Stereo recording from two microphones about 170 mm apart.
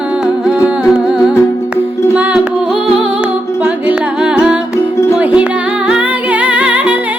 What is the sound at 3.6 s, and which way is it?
Music, 5° right (ahead or behind).